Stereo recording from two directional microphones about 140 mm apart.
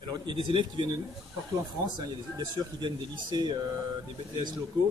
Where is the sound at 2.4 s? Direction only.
30° right (ahead or behind).